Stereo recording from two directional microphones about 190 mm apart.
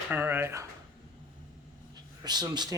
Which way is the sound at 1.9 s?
20° right (ahead or behind).